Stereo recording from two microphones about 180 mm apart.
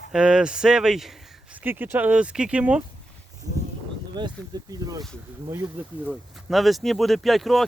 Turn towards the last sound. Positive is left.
turn(degrees=0)  # may be behind; listen again after turning